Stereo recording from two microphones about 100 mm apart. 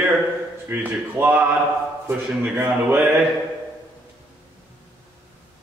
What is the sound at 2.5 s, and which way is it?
Speech, 20° right (ahead or behind).